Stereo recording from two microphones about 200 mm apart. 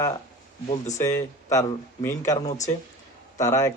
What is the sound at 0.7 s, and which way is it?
Speech, 35° left (ahead or behind).